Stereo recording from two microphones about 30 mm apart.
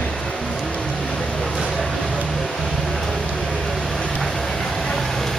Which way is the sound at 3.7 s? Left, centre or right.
Centre.